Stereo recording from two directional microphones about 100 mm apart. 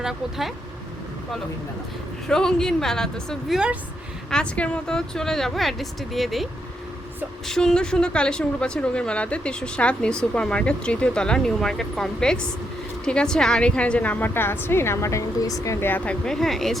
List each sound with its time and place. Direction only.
0.0 s speech: 5° right (ahead or behind)
2.2 s speech: 5° left (ahead or behind); by 15.9 s 30° left (ahead or behind)
15.9 s speech: 15° left (ahead or behind)